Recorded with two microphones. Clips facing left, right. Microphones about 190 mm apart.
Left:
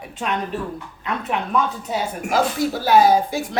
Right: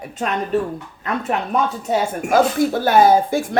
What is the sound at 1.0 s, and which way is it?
Speech, 45° right (ahead or behind).